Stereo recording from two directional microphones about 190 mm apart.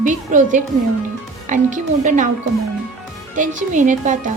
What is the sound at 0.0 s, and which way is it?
A woman's voice, 40° right (ahead or behind).